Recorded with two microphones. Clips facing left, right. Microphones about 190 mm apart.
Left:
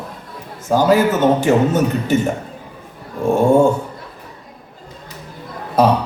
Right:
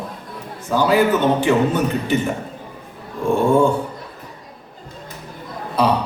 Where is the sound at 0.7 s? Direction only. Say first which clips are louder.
Left 2 dB; 45° left (ahead or behind).